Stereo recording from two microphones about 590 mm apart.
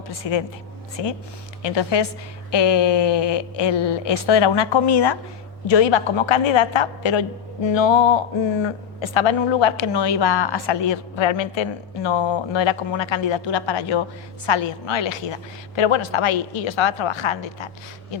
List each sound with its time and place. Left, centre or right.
0.2 s a woman's voice: left